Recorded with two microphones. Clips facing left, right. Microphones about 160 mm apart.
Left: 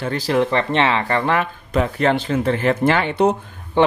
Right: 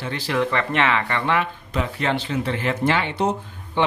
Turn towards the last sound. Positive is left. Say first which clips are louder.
# left 6 dB
turn(degrees=45)  # may be behind; listen again after turning